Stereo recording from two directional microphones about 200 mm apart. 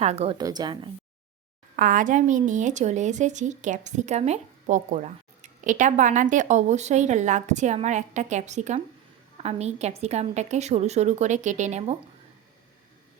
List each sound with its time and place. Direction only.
0.0 s speech: 30° right (ahead or behind)
0.3 s speech: 20° right (ahead or behind)
1.7 s speech: 45° right (ahead or behind)